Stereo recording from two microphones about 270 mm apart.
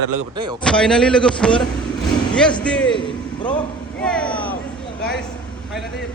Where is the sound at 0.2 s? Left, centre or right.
Centre.